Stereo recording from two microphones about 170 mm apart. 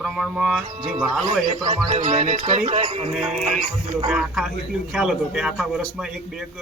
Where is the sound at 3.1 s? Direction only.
5° right (ahead or behind).